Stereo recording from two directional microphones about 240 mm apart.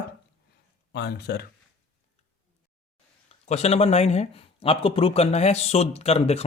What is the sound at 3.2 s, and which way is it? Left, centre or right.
Speech, left.